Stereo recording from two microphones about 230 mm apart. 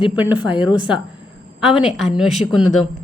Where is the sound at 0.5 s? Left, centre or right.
Centre.